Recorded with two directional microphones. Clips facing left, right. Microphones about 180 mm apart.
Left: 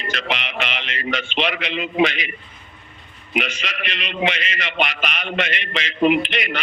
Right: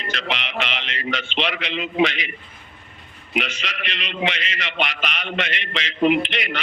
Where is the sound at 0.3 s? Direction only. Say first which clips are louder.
Even; 50° left (ahead or behind).